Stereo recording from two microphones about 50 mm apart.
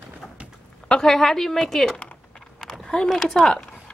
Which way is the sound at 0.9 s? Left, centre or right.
Centre.